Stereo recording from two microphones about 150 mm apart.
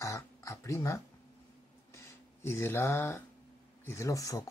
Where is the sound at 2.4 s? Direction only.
15° left (ahead or behind).